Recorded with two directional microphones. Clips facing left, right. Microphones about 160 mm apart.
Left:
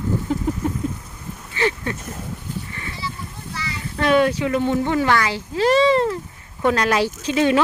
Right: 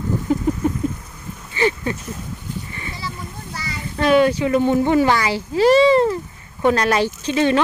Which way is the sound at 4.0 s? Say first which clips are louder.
Right 2 dB; centre (ahead or behind).